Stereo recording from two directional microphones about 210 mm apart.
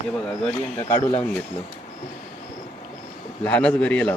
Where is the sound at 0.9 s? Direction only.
20° left (ahead or behind).